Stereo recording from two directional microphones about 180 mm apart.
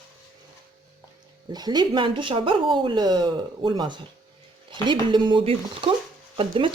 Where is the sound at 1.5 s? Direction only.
25° right (ahead or behind).